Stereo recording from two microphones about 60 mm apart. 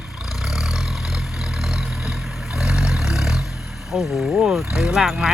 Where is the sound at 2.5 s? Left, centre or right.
Centre.